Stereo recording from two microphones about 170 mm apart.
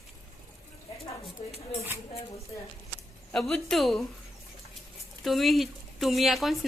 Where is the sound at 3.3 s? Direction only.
Centre (ahead or behind).